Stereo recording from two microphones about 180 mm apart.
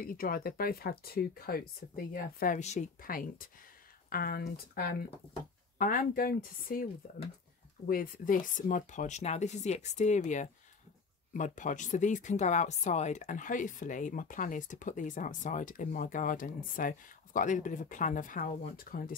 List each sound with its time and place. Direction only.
0.0 s speech: 55° left (ahead or behind)